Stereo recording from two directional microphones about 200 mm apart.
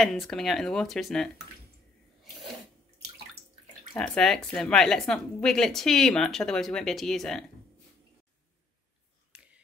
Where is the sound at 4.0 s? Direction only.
5° left (ahead or behind).